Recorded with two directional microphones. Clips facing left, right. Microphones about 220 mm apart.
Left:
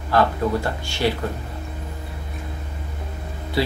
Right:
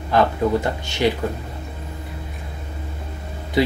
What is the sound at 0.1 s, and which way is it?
Speech, 20° right (ahead or behind).